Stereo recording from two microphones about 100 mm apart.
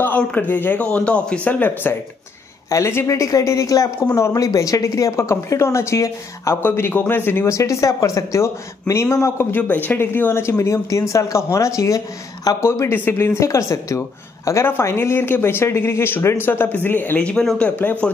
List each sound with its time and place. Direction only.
0.0 s speech: 15° left (ahead or behind)